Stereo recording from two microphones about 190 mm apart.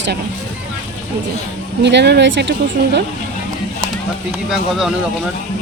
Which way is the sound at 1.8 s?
65° right (ahead or behind).